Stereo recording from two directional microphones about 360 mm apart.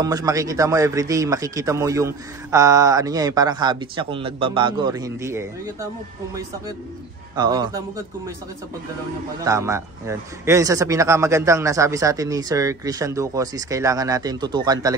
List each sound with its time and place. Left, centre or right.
0.0 s a man's voice: centre
7.3 s a man's voice: centre
9.4 s a man's voice: centre